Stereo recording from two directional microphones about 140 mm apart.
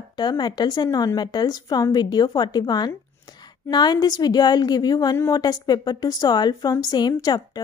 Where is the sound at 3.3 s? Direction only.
30° left (ahead or behind).